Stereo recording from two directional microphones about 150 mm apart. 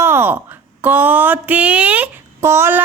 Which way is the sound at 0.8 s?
10° right (ahead or behind).